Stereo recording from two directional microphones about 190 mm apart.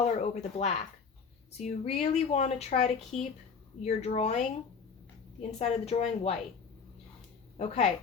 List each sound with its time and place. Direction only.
0.0 s speech: 35° left (ahead or behind)
5.4 s speech: 35° left (ahead or behind)
7.5 s speech: 35° left (ahead or behind)